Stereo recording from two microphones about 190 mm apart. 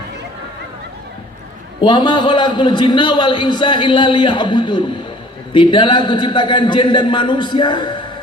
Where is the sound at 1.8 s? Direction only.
25° left (ahead or behind).